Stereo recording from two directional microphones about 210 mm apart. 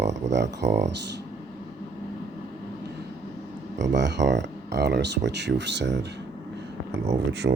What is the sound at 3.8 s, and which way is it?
Speech, 55° right (ahead or behind).